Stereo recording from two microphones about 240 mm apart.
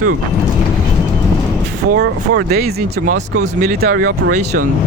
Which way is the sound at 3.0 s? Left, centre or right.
Right.